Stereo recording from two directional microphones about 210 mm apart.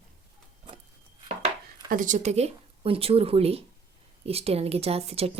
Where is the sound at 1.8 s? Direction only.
40° right (ahead or behind).